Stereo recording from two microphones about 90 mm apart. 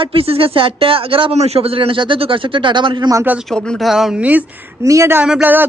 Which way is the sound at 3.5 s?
5° left (ahead or behind).